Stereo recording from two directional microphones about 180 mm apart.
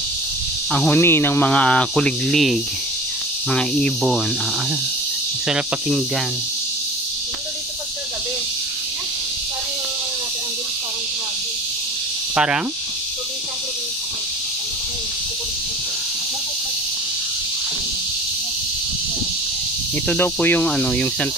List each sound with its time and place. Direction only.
0.7 s speech: 5° left (ahead or behind)
3.4 s snake: 5° left (ahead or behind)
5.5 s snake: 5° right (ahead or behind)
12.4 s snake: 5° right (ahead or behind)
20.1 s speech: 10° left (ahead or behind)